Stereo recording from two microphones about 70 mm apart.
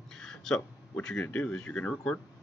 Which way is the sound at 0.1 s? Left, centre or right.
Centre.